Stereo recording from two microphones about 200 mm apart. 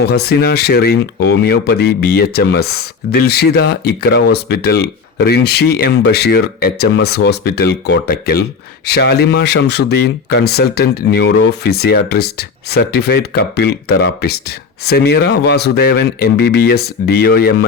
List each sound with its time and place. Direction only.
0.1 s speech: 55° left (ahead or behind)